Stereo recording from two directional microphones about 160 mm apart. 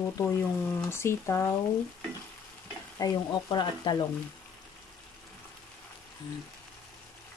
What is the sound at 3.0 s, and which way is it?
Speech, 25° left (ahead or behind).